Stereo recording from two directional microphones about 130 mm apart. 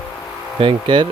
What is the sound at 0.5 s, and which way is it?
Speech, 40° right (ahead or behind).